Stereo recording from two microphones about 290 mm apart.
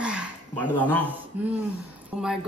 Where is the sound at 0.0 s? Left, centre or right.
Centre.